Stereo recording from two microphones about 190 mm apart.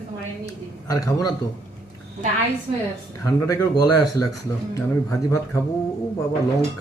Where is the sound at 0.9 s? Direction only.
20° left (ahead or behind).